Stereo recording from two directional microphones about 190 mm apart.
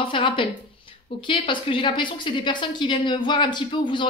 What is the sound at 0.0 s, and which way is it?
A woman's voice, 25° left (ahead or behind).